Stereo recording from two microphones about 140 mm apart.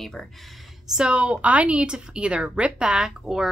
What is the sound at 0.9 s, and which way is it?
Speech, 5° right (ahead or behind).